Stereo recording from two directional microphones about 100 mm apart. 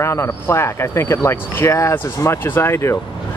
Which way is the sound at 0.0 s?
25° left (ahead or behind).